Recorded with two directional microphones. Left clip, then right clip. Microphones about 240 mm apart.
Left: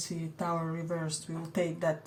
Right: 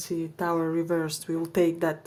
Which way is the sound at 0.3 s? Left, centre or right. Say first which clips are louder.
Right 7 dB; right.